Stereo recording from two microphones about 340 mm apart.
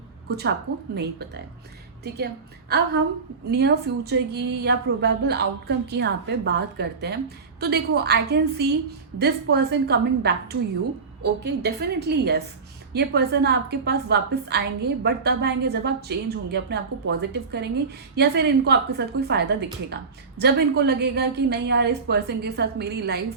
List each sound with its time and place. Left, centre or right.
0.3 s a woman's voice: right
2.1 s a woman's voice: right